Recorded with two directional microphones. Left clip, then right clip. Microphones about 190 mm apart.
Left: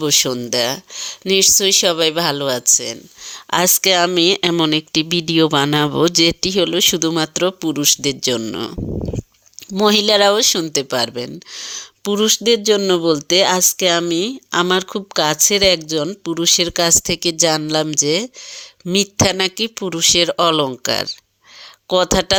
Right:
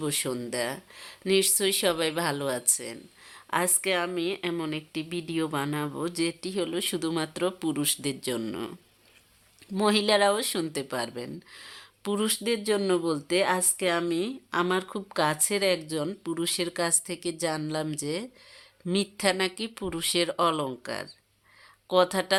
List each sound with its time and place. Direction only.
0.0 s speech: 40° left (ahead or behind)